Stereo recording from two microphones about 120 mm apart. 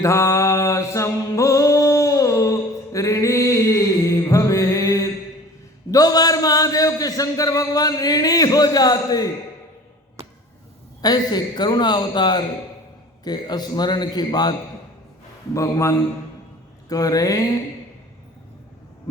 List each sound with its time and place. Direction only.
0.0 s mantra: 25° left (ahead or behind)
1.3 s a sound: 25° left (ahead or behind)
5.9 s a man's voice: 30° left (ahead or behind)
10.2 s a sound: 60° right (ahead or behind)
11.0 s a man's voice: 35° left (ahead or behind)
15.5 s a man's voice: 25° left (ahead or behind)